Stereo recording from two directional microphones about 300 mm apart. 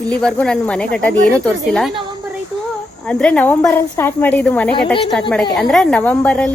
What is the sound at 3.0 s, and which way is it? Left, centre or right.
A woman's voice, centre.